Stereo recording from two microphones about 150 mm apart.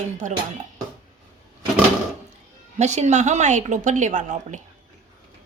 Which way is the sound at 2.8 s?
50° right (ahead or behind).